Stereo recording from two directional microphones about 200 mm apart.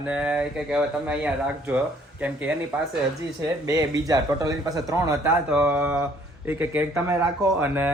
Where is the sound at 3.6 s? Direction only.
15° right (ahead or behind).